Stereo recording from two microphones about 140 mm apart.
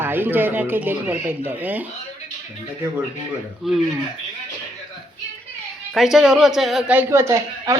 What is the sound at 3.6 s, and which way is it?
Speech, centre (ahead or behind).